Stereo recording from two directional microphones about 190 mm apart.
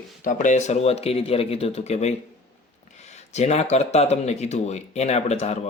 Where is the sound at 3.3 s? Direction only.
35° left (ahead or behind).